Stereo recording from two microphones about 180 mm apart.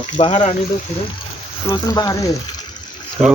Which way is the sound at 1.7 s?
20° left (ahead or behind).